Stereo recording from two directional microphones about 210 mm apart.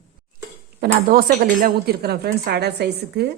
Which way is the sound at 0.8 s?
45° right (ahead or behind).